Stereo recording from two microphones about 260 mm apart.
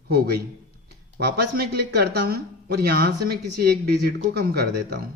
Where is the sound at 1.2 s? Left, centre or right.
Right.